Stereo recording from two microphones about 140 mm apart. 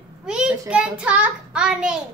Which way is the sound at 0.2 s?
5° right (ahead or behind).